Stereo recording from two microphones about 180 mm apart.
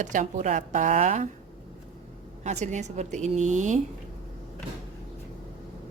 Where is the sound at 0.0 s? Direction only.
45° right (ahead or behind).